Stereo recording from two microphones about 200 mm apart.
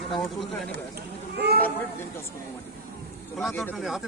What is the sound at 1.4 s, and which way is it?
Speech, 50° right (ahead or behind).